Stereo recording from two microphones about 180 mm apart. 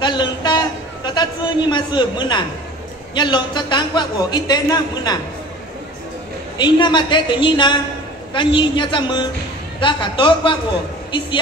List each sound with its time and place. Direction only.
0.0 s a sound: 25° left (ahead or behind)
3.2 s a man's voice: 25° left (ahead or behind)
6.6 s a man's voice: 25° left (ahead or behind)